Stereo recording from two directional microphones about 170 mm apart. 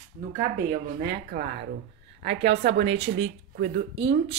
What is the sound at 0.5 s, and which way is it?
Speech, 55° right (ahead or behind).